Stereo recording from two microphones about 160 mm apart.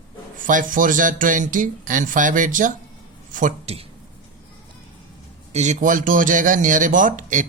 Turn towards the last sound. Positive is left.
turn(degrees=-55)  # may be behind; listen again after turning